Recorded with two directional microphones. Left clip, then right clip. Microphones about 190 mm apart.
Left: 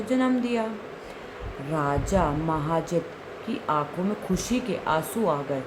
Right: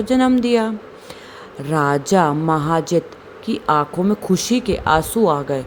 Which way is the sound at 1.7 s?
55° right (ahead or behind).